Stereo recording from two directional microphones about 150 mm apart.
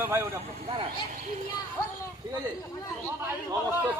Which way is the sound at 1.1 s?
55° right (ahead or behind).